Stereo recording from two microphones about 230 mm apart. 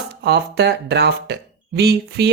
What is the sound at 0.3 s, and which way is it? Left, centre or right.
Speech, right.